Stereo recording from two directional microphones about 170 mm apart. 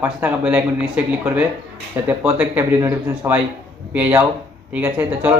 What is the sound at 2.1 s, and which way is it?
Speech, 10° right (ahead or behind).